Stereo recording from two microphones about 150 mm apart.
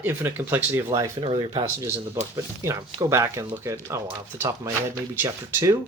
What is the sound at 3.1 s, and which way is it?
Speech, 15° right (ahead or behind).